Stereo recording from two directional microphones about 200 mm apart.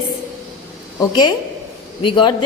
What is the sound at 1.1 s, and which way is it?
A woman's voice, 20° left (ahead or behind).